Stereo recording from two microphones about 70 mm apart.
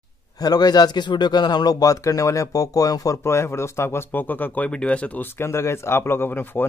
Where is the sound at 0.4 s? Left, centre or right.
Left.